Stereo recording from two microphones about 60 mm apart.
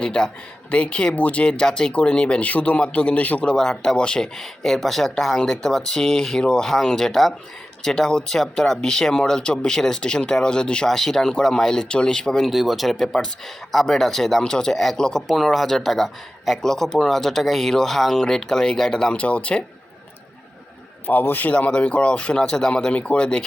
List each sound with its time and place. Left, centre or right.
0.0 s speech: centre
10.8 s speech: centre
12.5 s speech: centre
15.3 s speech: centre
21.1 s a man's voice: left
21.5 s speech: centre